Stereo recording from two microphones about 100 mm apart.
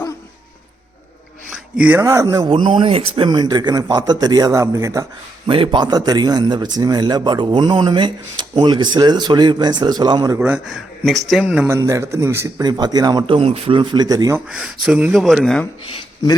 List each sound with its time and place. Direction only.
1.7 s speech: 10° right (ahead or behind)
2.0 s speech: 30° right (ahead or behind)
2.6 s speech: 60° right (ahead or behind)
3.2 s speech: 45° right (ahead or behind)
5.5 s speech: 50° right (ahead or behind)
10.3 s a man's voice: 20° right (ahead or behind)
10.7 s speech: centre (ahead or behind)
11.4 s speech: 10° right (ahead or behind)
11.7 s a man's voice: 30° right (ahead or behind)
12.6 s speech: 45° right (ahead or behind)
13.2 s speech: 65° right (ahead or behind); by 14.3 s 40° right (ahead or behind)
14.4 s speech: 5° right (ahead or behind)